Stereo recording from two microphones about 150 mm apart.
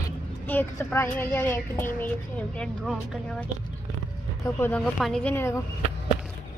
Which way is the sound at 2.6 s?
5° left (ahead or behind).